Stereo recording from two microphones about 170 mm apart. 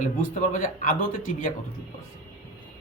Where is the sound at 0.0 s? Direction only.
45° left (ahead or behind).